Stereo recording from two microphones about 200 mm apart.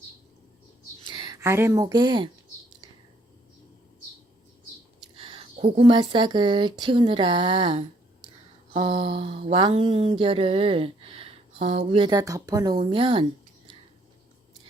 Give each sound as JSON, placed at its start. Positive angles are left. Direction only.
{"t": 1.0, "sound": "speech", "side_deg": -25}
{"t": 5.1, "sound": "mantra", "side_deg": -25}